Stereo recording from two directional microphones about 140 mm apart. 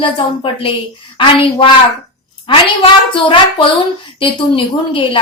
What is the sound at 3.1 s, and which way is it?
A woman's voice, 40° left (ahead or behind).